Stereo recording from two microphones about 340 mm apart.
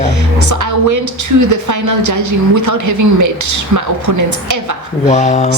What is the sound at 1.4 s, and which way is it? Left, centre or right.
A woman's voice, right.